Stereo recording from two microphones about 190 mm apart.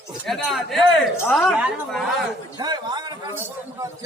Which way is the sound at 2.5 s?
20° right (ahead or behind).